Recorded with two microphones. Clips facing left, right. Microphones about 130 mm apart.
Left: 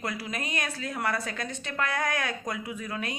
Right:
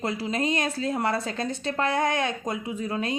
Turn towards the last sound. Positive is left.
turn(degrees=-30)  # may be behind; listen again after turning